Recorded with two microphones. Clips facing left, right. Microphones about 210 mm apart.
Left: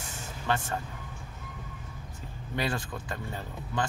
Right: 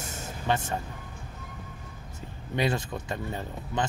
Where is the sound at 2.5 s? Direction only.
20° right (ahead or behind).